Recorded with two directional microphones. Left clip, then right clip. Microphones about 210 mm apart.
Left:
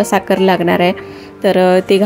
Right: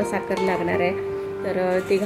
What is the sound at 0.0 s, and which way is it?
Speech, 45° left (ahead or behind).